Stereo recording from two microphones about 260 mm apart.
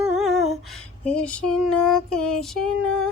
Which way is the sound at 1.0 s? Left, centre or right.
Centre.